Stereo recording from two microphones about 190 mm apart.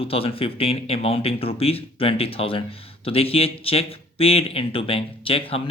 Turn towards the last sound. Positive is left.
turn(degrees=30)  # may be behind; listen again after turning